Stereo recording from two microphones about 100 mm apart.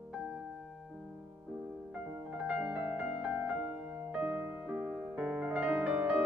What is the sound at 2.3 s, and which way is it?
Music, 10° right (ahead or behind).